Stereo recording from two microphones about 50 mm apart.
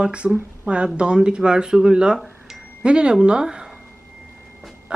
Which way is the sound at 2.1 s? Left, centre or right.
Centre.